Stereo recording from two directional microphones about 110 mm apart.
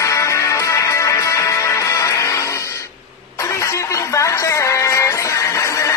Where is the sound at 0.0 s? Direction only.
30° left (ahead or behind).